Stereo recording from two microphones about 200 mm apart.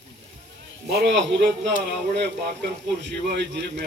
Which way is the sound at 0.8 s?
60° right (ahead or behind).